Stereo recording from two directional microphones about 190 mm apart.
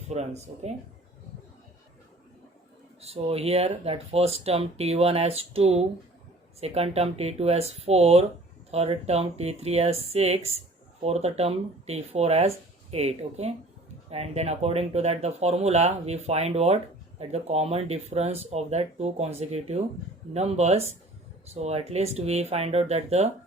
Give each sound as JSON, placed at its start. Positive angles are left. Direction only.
{"t": 0.1, "sound": "speech", "side_deg": -35}
{"t": 3.0, "sound": "speech", "side_deg": -30}